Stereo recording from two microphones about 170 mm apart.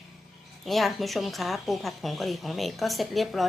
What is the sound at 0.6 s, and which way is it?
A woman's voice, centre (ahead or behind).